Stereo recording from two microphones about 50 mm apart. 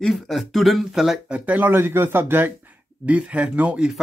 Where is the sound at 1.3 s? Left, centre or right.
Right.